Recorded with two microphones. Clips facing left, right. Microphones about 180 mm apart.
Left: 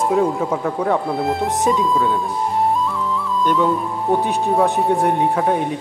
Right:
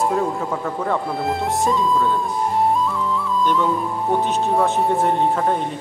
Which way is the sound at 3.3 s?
Centre (ahead or behind).